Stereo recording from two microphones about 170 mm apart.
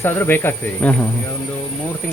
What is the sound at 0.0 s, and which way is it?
Speech, 15° left (ahead or behind).